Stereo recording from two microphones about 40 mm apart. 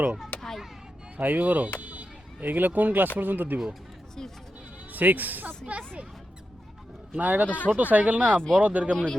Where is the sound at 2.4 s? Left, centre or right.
Right.